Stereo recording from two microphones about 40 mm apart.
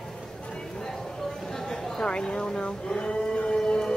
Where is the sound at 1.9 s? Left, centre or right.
Left.